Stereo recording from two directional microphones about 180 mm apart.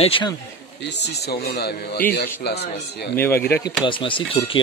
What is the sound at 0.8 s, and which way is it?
Speech, 70° left (ahead or behind).